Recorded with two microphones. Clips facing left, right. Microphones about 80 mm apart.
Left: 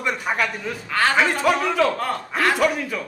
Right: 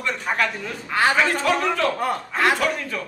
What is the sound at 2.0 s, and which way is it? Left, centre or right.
Speech, centre.